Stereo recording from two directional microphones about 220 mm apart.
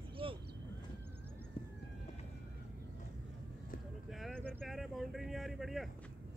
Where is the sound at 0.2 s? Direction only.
25° right (ahead or behind).